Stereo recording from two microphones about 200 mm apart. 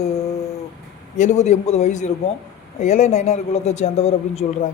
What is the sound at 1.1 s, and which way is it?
Speech, 35° left (ahead or behind).